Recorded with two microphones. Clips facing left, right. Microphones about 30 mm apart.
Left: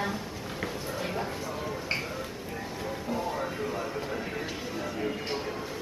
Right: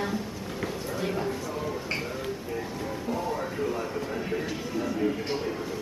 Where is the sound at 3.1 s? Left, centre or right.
Centre.